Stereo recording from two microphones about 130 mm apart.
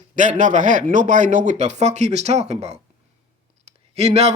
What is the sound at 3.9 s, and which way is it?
Speech, 55° right (ahead or behind).